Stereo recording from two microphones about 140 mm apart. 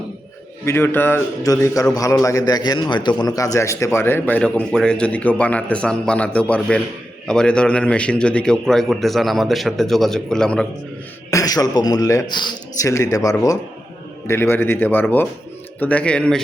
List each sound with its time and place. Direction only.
0.6 s a man's voice: 15° left (ahead or behind)
11.3 s a man's voice: 25° left (ahead or behind); by 16.4 s 5° left (ahead or behind)